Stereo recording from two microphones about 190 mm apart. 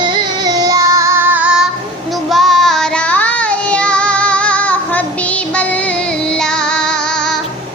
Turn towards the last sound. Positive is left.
turn(degrees=5)  # may be behind; listen again after turning